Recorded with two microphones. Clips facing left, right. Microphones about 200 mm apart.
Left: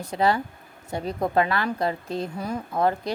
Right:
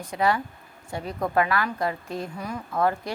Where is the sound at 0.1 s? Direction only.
30° left (ahead or behind).